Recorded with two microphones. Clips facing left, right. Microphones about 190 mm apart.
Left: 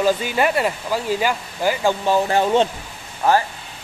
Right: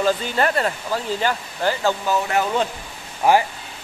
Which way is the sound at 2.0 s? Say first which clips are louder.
Left 3 dB; 30° left (ahead or behind).